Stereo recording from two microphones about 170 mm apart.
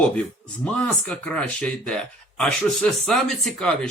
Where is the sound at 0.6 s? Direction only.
5° left (ahead or behind).